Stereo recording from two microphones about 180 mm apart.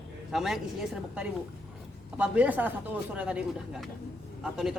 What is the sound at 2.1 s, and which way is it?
Speech, 5° right (ahead or behind).